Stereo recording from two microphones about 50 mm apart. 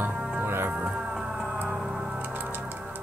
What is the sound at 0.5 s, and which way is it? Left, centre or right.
Music, right.